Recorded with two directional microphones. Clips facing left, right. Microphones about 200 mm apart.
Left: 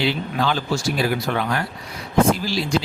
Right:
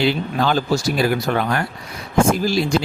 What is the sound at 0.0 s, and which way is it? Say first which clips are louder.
Speech: right 3 dB; 45° right (ahead or behind).